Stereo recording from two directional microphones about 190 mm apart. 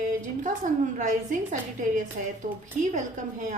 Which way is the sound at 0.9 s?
40° right (ahead or behind).